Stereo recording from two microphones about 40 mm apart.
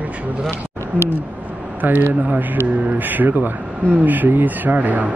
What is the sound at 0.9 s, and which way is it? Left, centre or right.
Speech, left.